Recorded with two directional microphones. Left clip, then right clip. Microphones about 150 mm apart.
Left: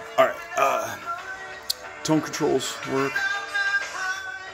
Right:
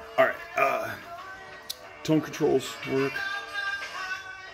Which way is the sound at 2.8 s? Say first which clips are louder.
Left 4 dB; 35° left (ahead or behind).